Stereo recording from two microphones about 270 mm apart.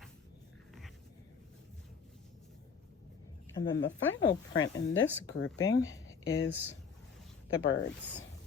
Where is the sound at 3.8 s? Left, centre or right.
Left.